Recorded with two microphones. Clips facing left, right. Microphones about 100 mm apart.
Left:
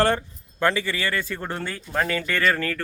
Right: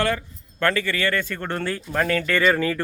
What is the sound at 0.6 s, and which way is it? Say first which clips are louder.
Speech: right 1 dB; 15° left (ahead or behind).